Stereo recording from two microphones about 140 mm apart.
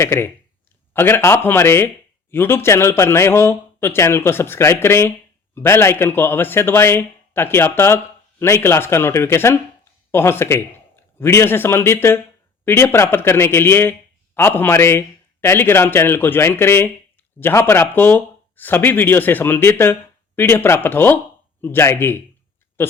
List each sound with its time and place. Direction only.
0.0 s a man's voice: 20° left (ahead or behind)